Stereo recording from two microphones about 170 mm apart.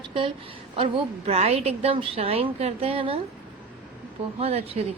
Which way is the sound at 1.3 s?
35° right (ahead or behind).